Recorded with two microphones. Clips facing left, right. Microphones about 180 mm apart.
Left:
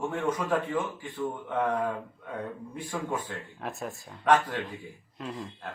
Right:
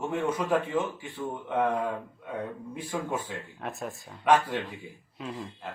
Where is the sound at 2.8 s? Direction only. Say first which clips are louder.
Right 1 dB; 10° right (ahead or behind).